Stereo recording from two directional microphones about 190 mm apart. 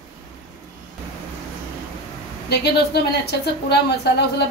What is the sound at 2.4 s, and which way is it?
A woman's voice, 60° left (ahead or behind).